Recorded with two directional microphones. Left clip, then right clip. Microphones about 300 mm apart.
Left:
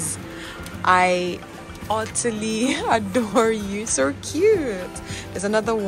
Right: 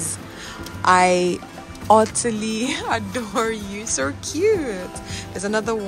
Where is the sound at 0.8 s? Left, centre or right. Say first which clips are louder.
Right 2 dB; centre.